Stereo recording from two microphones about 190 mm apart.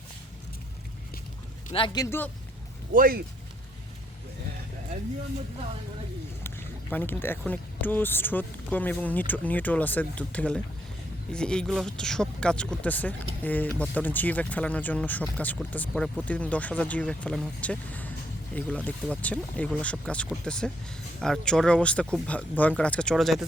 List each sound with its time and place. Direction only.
1.7 s a man's voice: 25° left (ahead or behind)
2.9 s speech: 50° right (ahead or behind)
6.4 s speech: 10° left (ahead or behind)